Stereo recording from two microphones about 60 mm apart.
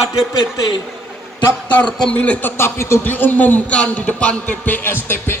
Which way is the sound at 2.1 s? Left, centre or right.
Left.